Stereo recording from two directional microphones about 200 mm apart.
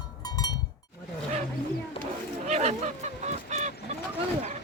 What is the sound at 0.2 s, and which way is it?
Cowbell, 20° left (ahead or behind).